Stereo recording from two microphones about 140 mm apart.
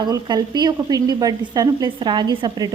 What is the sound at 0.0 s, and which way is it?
A woman's voice, 30° right (ahead or behind).